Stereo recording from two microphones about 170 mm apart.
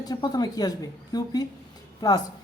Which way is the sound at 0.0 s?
25° left (ahead or behind).